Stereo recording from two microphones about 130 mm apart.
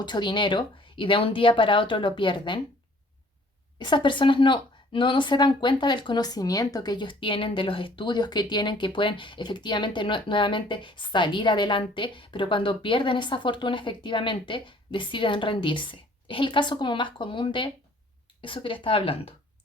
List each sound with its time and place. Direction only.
0.0 s speech: 35° left (ahead or behind)
3.8 s a woman's voice: 35° left (ahead or behind)